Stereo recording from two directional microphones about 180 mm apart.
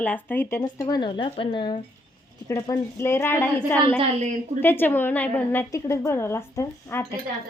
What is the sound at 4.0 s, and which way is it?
Speech, 40° right (ahead or behind).